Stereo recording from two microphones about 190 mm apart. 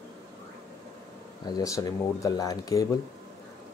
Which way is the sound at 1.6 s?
20° left (ahead or behind).